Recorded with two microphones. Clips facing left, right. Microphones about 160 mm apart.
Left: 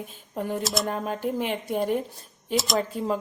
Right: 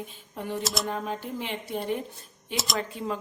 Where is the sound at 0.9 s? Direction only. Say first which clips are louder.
Left 4 dB; 50° left (ahead or behind).